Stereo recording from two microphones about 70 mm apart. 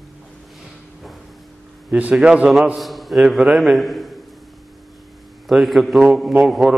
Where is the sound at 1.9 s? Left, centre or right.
Right.